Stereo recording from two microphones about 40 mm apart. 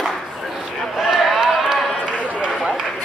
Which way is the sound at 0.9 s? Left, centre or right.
Centre.